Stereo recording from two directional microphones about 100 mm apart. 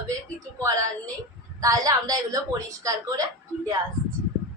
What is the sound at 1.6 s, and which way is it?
A woman's voice, 35° right (ahead or behind).